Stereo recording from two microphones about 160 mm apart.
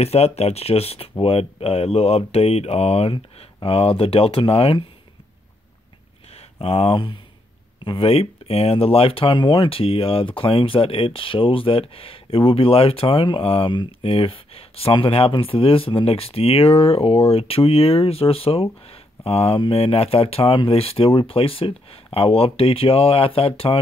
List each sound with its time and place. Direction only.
0.0 s speech: 40° left (ahead or behind)
6.3 s speech: 40° left (ahead or behind)